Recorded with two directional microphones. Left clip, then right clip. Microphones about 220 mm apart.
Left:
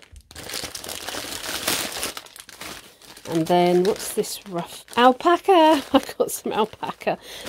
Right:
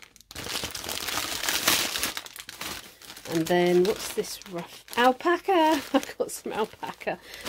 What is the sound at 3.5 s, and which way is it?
Speech, 40° left (ahead or behind).